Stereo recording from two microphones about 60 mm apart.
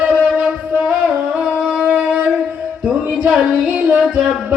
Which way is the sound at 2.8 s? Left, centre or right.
Centre.